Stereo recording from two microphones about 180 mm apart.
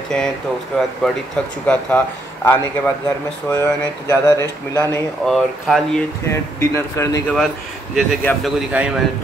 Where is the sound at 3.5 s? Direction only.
15° left (ahead or behind).